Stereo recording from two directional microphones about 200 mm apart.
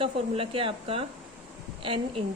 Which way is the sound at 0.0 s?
25° right (ahead or behind).